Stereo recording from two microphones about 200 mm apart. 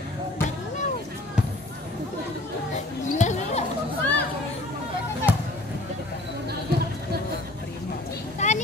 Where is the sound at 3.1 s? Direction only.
35° left (ahead or behind).